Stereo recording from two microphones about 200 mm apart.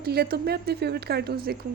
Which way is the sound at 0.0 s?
50° right (ahead or behind).